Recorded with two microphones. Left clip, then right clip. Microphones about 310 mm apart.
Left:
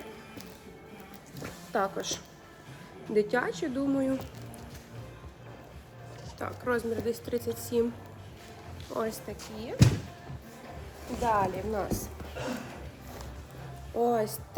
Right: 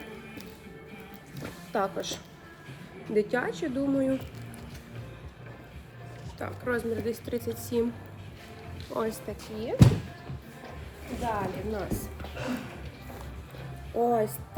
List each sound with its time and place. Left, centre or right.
1.4 s a sound: centre
3.2 s speech: centre
6.4 s speech: centre
8.9 s speech: centre
11.2 s speech: left
14.0 s speech: centre